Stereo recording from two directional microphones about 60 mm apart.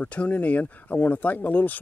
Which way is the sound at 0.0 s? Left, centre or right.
Left.